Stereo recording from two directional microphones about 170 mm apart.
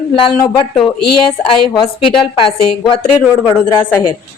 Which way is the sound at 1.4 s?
30° left (ahead or behind).